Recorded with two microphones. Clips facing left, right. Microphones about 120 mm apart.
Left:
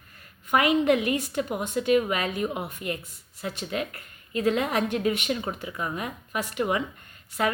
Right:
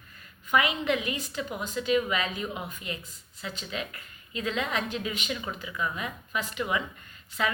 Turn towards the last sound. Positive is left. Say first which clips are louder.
# left 4 dB
turn(degrees=50)  # may be behind; listen again after turning